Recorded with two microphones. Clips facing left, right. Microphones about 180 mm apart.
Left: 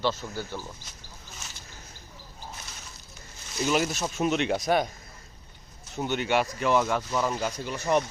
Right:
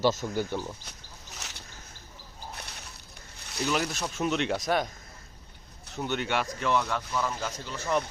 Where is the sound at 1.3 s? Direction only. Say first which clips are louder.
Right 2 dB; 75° right (ahead or behind).